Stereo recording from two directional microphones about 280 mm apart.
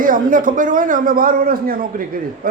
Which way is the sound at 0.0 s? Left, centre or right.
Right.